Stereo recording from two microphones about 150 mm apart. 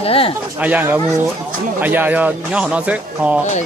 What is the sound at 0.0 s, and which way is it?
Speech, 40° left (ahead or behind).